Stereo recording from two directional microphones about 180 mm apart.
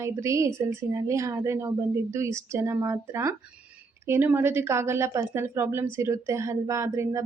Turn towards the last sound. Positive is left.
turn(degrees=-15)  # may be behind; listen again after turning